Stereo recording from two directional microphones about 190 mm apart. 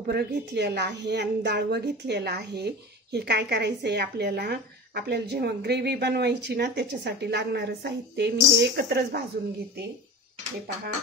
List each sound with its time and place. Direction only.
0.0 s a woman's voice: 55° right (ahead or behind)